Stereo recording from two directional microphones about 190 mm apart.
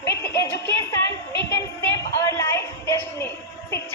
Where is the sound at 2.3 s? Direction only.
15° left (ahead or behind).